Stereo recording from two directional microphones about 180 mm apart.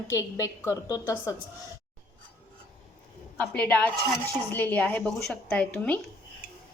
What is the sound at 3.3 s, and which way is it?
A woman's voice, 5° left (ahead or behind).